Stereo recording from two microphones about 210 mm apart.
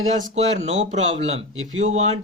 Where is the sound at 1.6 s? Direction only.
70° right (ahead or behind).